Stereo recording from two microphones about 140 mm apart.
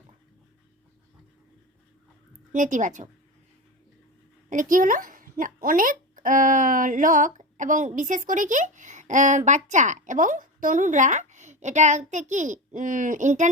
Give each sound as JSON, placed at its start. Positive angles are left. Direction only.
{"t": 2.5, "sound": "speech", "side_deg": -65}
{"t": 4.4, "sound": "speech", "side_deg": -70}